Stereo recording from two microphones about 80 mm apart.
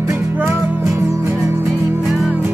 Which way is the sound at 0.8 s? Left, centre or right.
Right.